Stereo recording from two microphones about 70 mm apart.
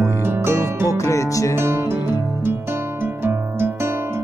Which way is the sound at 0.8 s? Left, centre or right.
Left.